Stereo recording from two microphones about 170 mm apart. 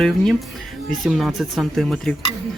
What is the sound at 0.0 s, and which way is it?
Speech, centre (ahead or behind).